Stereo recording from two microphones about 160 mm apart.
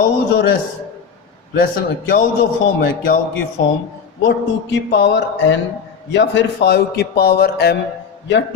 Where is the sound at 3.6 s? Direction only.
90° left.